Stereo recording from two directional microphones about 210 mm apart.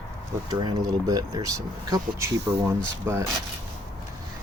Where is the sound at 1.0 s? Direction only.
15° right (ahead or behind).